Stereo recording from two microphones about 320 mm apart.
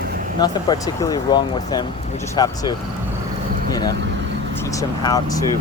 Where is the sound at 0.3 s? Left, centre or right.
Centre.